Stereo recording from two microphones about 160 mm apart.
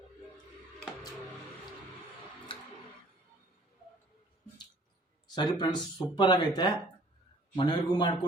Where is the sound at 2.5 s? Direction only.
30° left (ahead or behind).